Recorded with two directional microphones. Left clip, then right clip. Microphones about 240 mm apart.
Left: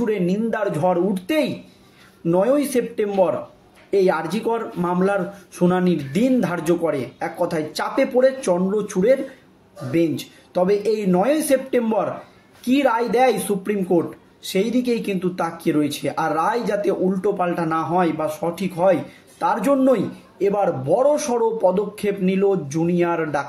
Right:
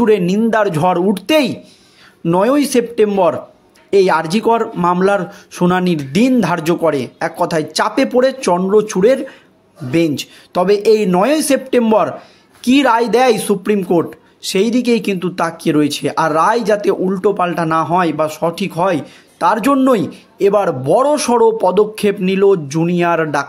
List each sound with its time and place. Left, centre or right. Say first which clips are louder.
0.0 s speech: right 9 dB; right